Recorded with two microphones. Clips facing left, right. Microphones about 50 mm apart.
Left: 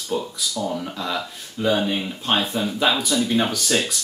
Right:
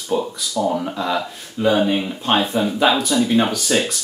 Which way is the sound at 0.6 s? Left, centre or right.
Right.